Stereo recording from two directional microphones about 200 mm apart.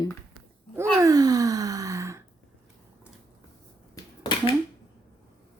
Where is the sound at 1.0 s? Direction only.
20° right (ahead or behind).